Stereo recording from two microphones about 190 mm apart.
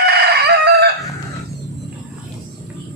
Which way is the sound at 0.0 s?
60° right (ahead or behind).